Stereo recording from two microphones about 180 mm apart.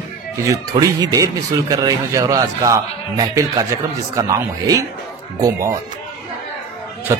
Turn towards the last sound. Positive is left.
turn(degrees=-15)  # may be behind; listen again after turning